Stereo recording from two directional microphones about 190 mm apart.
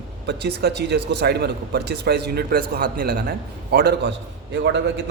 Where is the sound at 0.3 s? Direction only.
60° right (ahead or behind).